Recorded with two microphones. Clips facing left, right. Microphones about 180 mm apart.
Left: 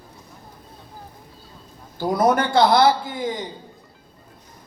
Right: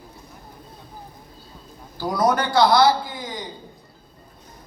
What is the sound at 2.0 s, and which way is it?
Speech, 25° left (ahead or behind).